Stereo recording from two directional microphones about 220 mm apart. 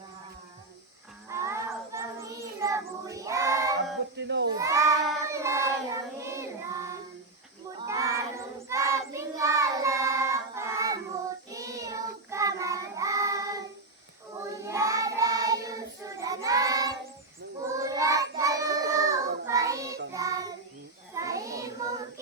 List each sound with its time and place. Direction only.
1.3 s child singing: 15° right (ahead or behind)
3.8 s a sound: 50° right (ahead or behind)
4.5 s child singing: 15° right (ahead or behind)